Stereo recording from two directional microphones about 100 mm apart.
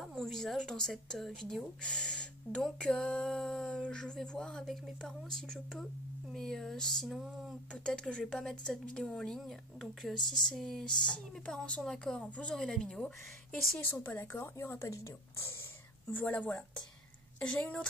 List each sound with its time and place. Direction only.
0.0 s speech: 5° left (ahead or behind)
7.2 s a sound: 5° right (ahead or behind)
7.7 s speech: 10° left (ahead or behind)
13.8 s a woman's voice: 20° left (ahead or behind)
16.1 s speech: 20° left (ahead or behind)